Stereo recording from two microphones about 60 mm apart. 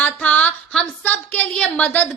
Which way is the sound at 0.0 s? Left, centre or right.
Left.